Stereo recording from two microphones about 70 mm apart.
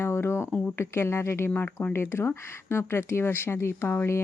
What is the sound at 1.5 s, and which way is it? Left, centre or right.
Speech, left.